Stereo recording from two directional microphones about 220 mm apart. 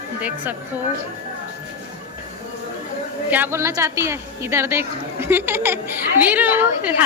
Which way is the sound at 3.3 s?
10° right (ahead or behind).